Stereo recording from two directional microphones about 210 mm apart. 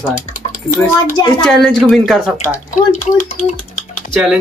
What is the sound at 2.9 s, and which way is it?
Speech, 35° left (ahead or behind).